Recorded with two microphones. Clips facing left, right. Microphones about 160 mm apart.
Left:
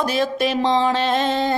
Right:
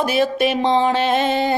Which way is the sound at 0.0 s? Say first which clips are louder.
Right 3 dB; 5° right (ahead or behind).